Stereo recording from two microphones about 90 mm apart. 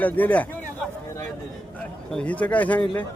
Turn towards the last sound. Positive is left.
turn(degrees=15)  # may be behind; listen again after turning